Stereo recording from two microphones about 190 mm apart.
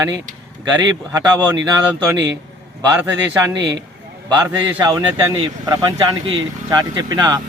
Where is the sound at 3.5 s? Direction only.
70° right (ahead or behind).